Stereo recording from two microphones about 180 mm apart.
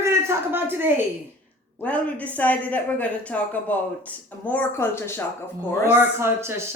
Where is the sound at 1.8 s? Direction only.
5° left (ahead or behind).